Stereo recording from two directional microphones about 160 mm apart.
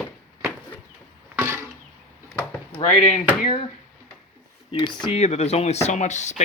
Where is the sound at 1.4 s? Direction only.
15° right (ahead or behind).